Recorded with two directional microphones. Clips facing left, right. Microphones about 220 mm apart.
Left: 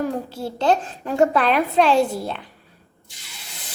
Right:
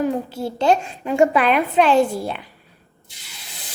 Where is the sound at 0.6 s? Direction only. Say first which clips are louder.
Right 2 dB; 10° right (ahead or behind).